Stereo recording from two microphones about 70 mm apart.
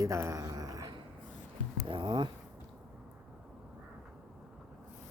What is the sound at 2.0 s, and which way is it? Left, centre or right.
Speech, right.